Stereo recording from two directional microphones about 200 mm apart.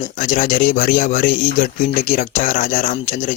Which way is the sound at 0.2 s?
40° left (ahead or behind).